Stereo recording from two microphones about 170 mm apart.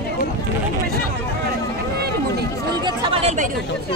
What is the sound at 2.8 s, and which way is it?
Chatter, 30° right (ahead or behind).